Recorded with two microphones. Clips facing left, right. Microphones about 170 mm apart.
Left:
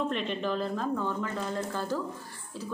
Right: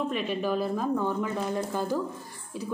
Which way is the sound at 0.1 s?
5° right (ahead or behind).